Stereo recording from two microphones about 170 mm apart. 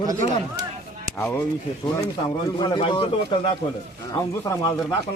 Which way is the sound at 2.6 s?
25° left (ahead or behind).